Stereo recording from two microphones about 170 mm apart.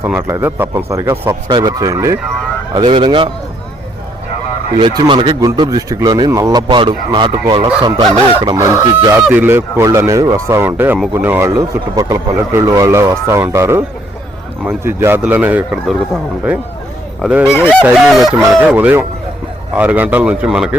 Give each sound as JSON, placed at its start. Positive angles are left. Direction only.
{"t": 0.0, "sound": "speech", "side_deg": -15}
{"t": 4.8, "sound": "speech", "side_deg": -30}
{"t": 9.2, "sound": "speech", "side_deg": -10}
{"t": 17.7, "sound": "fowl", "side_deg": -5}
{"t": 18.7, "sound": "speech", "side_deg": -10}